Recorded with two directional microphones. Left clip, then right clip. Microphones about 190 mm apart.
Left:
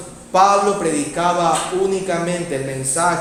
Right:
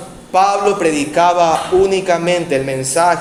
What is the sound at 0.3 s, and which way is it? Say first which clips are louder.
A man's voice: right 1 dB; 35° right (ahead or behind).